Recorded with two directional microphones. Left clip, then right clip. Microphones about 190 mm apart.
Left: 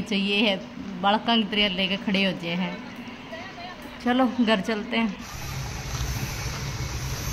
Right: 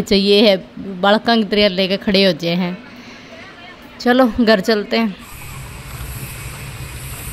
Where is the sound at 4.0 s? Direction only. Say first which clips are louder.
Right 10 dB; 30° right (ahead or behind).